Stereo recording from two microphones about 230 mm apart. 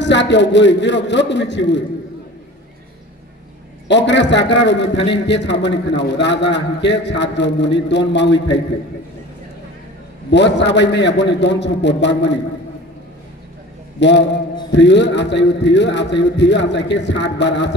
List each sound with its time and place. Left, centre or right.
0.0 s a man's voice: left
3.8 s a man's voice: left
10.3 s a man's voice: left
13.9 s a man's voice: left